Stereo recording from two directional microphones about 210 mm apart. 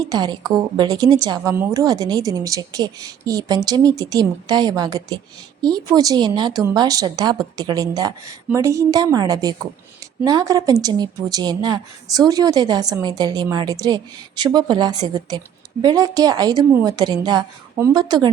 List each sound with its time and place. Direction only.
0.0 s a woman's voice: 20° right (ahead or behind)